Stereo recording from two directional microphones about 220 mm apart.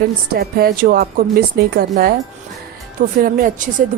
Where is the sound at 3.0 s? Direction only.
40° right (ahead or behind).